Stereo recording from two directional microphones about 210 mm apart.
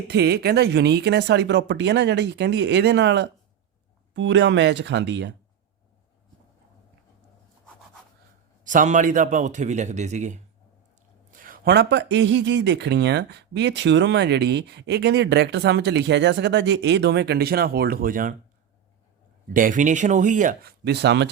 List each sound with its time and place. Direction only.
0.1 s speech: 50° right (ahead or behind)
8.6 s a man's voice: 40° right (ahead or behind)
19.5 s a man's voice: 40° right (ahead or behind)
20.8 s speech: 55° right (ahead or behind)